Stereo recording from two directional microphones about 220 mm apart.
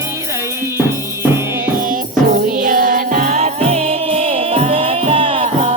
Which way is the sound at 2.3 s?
40° right (ahead or behind).